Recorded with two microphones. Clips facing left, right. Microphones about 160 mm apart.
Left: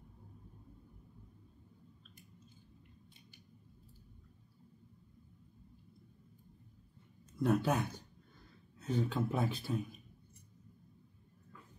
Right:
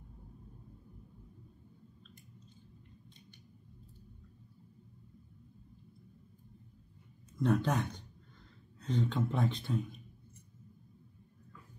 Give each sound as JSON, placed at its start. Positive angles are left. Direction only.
{"t": 7.3, "sound": "speech", "side_deg": 10}